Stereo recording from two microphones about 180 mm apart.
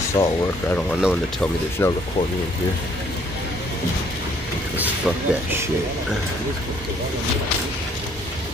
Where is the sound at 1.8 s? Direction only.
15° left (ahead or behind).